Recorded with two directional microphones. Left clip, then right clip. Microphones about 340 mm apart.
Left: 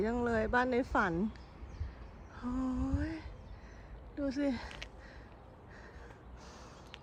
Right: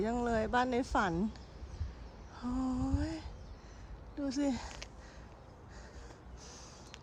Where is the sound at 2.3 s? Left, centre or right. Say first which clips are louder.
Right 1 dB; centre.